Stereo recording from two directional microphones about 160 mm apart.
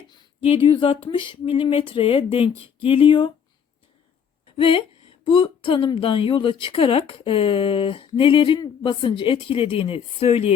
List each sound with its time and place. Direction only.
0.1 s a woman's voice: 35° left (ahead or behind)
4.5 s a woman's voice: 35° left (ahead or behind)